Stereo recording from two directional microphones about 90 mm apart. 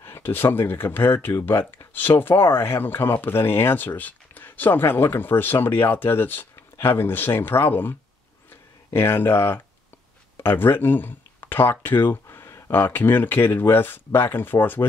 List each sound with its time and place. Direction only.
0.0 s speech: 25° left (ahead or behind)
8.9 s speech: 25° left (ahead or behind)